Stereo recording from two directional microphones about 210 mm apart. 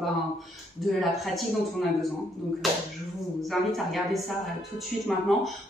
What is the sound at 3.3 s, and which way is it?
Speech, centre (ahead or behind).